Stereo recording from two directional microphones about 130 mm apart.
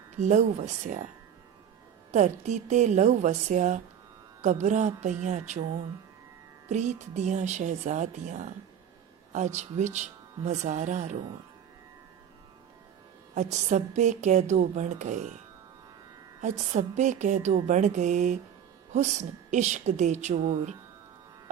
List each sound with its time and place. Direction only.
0.2 s a woman's voice: 60° right (ahead or behind)
2.4 s a woman's voice: 65° right (ahead or behind)
6.7 s a woman's voice: 65° right (ahead or behind)
13.3 s a woman's voice: 65° right (ahead or behind)
16.4 s music: 65° right (ahead or behind)
19.5 s a woman's voice: 65° right (ahead or behind)